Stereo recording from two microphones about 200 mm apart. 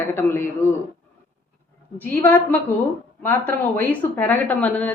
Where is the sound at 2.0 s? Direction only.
10° left (ahead or behind).